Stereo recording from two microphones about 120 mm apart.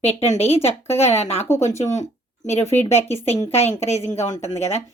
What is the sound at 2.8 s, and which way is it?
A woman's voice, 65° left (ahead or behind).